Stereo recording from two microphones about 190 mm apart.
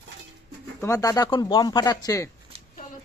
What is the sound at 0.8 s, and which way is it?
Speech, 15° left (ahead or behind).